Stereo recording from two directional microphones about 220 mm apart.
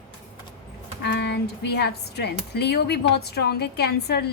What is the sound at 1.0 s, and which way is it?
Speech, 50° left (ahead or behind).